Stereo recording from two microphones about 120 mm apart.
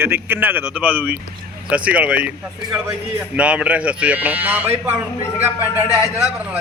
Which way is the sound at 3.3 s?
10° right (ahead or behind).